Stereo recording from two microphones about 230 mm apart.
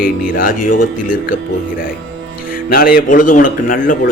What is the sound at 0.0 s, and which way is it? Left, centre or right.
A man's voice, left.